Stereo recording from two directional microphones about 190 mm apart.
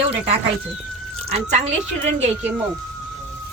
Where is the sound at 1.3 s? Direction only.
35° right (ahead or behind).